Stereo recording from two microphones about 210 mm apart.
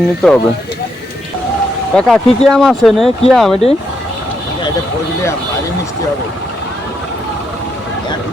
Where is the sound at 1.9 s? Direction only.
Centre (ahead or behind).